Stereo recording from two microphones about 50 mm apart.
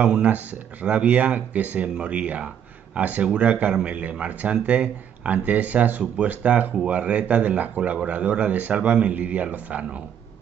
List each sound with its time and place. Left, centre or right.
0.0 s speech: right